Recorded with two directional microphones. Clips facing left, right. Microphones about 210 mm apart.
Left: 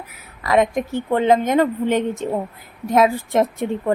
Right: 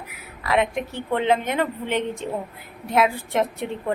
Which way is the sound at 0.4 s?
40° left (ahead or behind).